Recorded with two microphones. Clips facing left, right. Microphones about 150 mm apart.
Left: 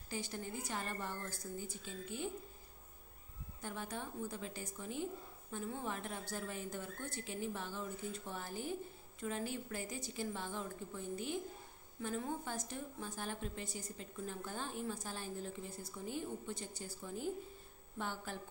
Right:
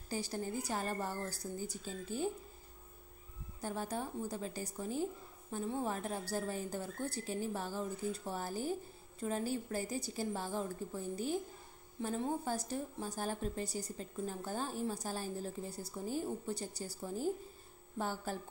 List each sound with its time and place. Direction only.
0.1 s a woman's voice: 35° right (ahead or behind)
3.6 s a woman's voice: 35° right (ahead or behind)